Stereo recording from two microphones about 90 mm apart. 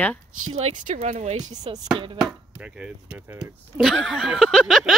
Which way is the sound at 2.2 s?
10° right (ahead or behind).